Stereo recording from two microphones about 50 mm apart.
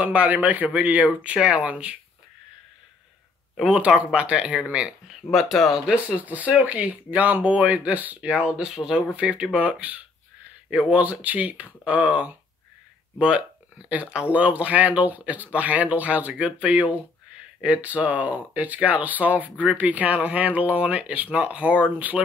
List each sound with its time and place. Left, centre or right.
0.0 s speech: right
3.6 s speech: centre
5.3 s speech: centre
6.1 s speech: right
8.3 s speech: right
9.1 s speech: right